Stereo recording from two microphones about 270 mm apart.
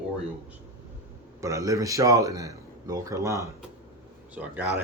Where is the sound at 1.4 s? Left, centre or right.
Centre.